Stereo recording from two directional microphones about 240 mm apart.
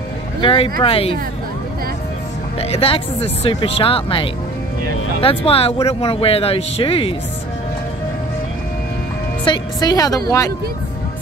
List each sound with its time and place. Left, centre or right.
0.4 s speech: left
2.6 s speech: left
9.4 s a woman's voice: centre